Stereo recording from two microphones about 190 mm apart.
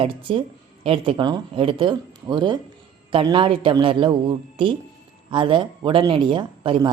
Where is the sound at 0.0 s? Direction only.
30° right (ahead or behind).